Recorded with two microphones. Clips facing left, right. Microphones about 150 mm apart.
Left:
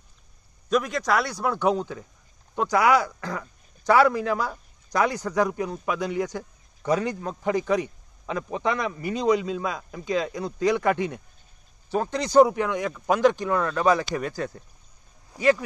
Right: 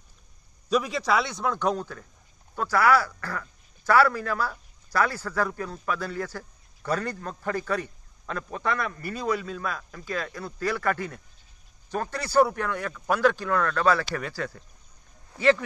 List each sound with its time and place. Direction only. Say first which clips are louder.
0.7 s a man's voice: left 1 dB; centre (ahead or behind); by 15.6 s 15° left (ahead or behind)